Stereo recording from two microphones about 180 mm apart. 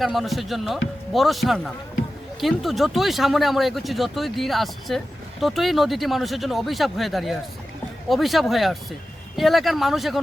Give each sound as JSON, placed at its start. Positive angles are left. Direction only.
{"t": 0.0, "sound": "speech", "side_deg": 0}